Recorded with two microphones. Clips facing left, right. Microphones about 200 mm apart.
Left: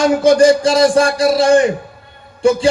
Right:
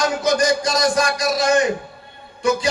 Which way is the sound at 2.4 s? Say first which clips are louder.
Left 6 dB; 30° left (ahead or behind).